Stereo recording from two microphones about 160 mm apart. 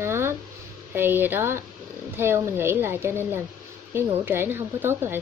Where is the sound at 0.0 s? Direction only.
15° right (ahead or behind).